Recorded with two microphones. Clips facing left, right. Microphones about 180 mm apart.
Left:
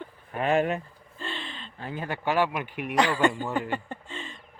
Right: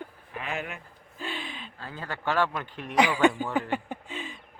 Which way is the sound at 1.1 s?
5° right (ahead or behind).